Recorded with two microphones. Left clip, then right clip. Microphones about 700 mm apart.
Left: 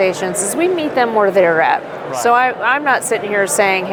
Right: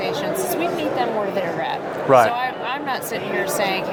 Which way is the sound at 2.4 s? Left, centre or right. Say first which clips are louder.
Left 10 dB; left.